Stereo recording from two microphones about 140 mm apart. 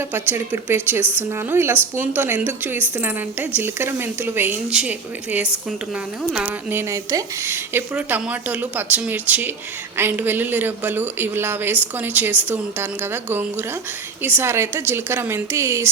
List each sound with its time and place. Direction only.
0.1 s a woman's voice: 15° right (ahead or behind)